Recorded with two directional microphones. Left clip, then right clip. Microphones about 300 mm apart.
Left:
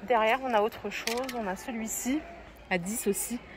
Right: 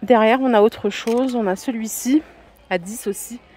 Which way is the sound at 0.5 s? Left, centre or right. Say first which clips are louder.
Right 12 dB; right.